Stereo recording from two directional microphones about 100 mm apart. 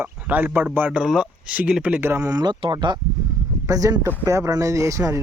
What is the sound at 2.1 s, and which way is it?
Speech, 35° right (ahead or behind).